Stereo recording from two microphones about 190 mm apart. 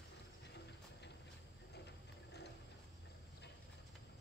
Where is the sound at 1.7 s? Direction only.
60° left (ahead or behind).